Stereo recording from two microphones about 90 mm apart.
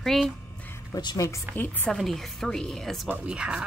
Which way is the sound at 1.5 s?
20° left (ahead or behind).